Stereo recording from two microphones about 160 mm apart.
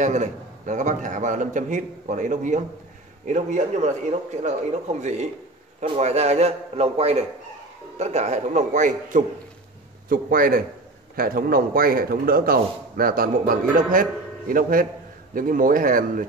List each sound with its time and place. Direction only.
0.0 s a man's voice: 50° right (ahead or behind)
10.0 s a man's voice: 60° right (ahead or behind)